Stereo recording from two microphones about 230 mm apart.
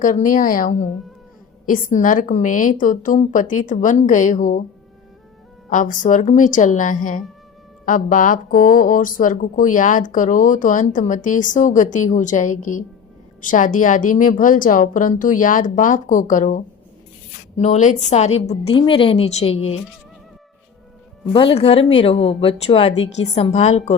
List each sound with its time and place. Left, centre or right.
0.0 s speech: left
5.7 s a woman's voice: left
21.3 s a woman's voice: left